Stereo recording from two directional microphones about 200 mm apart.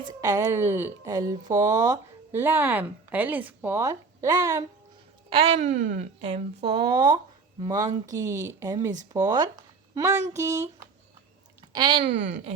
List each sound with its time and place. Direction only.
0.0 s a woman's voice: 20° right (ahead or behind)
1.3 s speech: 40° right (ahead or behind)
1.9 s speech: 10° right (ahead or behind)
5.3 s speech: 30° right (ahead or behind)
5.8 s speech: 40° right (ahead or behind)
6.6 s speech: 55° right (ahead or behind)
7.7 s a woman's voice: 15° right (ahead or behind)
11.7 s speech: 25° right (ahead or behind)
12.0 s speech: 65° right (ahead or behind)